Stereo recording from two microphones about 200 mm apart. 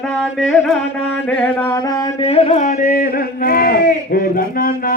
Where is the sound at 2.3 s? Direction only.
30° left (ahead or behind); by 4.9 s 45° left (ahead or behind).